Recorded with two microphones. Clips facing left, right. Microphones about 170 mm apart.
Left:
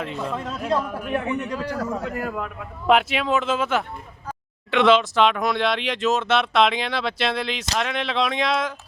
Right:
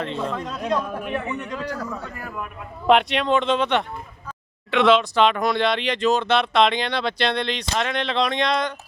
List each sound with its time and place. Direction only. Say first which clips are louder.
0.0 s a man's voice: right 1 dB; 5° left (ahead or behind)
2.0 s a man's voice: left 7 dB; 80° left
2.8 s speech: right 1 dB; centre (ahead or behind)